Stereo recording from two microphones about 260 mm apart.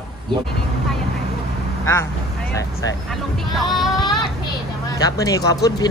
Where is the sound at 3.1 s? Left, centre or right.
Centre.